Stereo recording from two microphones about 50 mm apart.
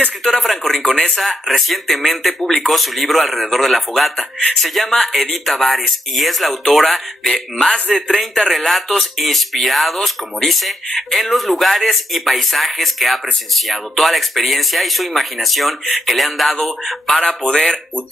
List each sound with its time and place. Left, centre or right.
0.2 s speech: centre
1.1 s speech: centre
8.2 s speech: centre
17.2 s speech: centre